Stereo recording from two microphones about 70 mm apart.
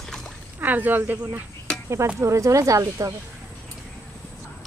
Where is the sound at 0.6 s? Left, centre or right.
Right.